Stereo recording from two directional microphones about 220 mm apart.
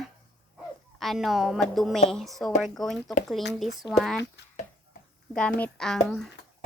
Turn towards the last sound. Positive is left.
turn(degrees=5)  # may be behind; listen again after turning